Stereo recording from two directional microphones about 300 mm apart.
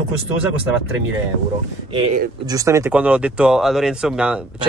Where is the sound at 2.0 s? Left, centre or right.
Right.